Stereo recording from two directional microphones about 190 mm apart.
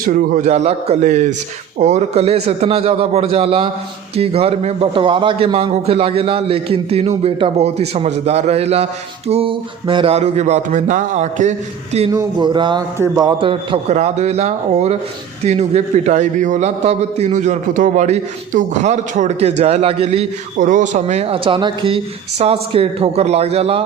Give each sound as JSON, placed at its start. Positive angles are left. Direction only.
{"t": 0.1, "sound": "a man's voice", "side_deg": -40}
{"t": 12.1, "sound": "a man's voice", "side_deg": -25}